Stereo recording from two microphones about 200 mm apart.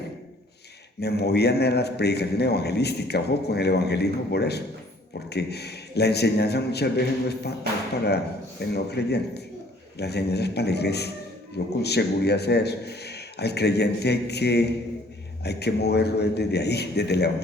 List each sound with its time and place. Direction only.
1.0 s a man's voice: 55° left (ahead or behind)